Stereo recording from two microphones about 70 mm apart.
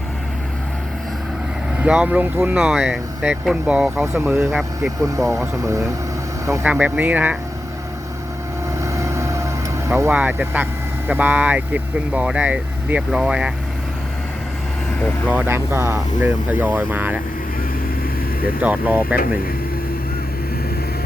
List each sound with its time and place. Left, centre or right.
1.8 s speech: centre
2.6 s speech: centre
4.0 s speech: right
5.3 s speech: right
6.7 s speech: centre
8.8 s vehicle: right
10.1 s speech: right
14.9 s speech: left
15.4 s speech: right
18.6 s speech: right